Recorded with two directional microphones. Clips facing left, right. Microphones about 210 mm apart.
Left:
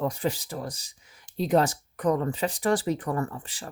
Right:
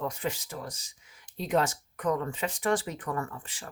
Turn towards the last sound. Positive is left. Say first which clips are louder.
# left 5 dB
turn(degrees=35)  # may be behind; listen again after turning